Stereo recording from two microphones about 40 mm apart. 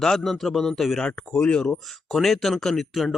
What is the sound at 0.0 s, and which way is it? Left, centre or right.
Speech, centre.